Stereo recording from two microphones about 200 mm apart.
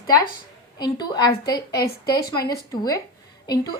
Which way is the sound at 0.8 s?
20° left (ahead or behind).